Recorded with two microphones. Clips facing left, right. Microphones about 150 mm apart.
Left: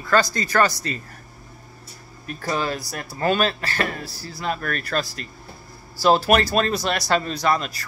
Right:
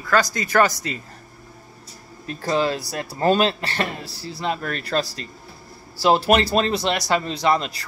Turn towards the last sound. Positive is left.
turn(degrees=-20)  # may be behind; listen again after turning